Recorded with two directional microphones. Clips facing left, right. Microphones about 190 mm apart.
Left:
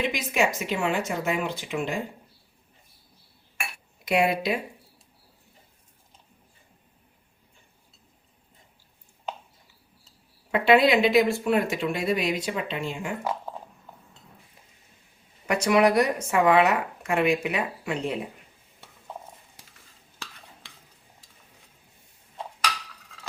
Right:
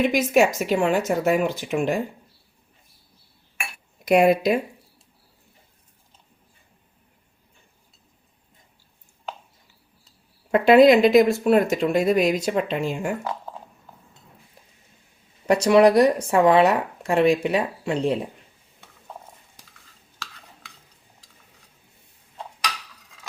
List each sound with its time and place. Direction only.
0.1 s speech: 45° right (ahead or behind)
4.0 s speech: 45° right (ahead or behind)
10.5 s speech: 45° right (ahead or behind)
15.4 s speech: 35° right (ahead or behind)